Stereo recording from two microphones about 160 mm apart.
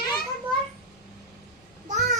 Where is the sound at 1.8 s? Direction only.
45° right (ahead or behind).